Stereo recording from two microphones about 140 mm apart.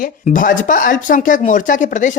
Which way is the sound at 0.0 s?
75° left (ahead or behind).